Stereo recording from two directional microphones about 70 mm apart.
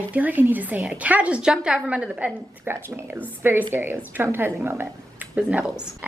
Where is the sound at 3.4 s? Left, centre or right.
Right.